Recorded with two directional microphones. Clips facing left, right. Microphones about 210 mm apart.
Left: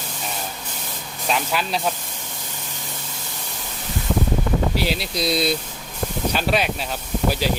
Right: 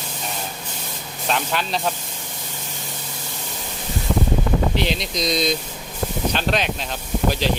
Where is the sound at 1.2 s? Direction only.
5° left (ahead or behind).